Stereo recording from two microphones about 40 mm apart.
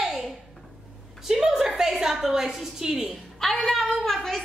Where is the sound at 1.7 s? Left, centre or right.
Centre.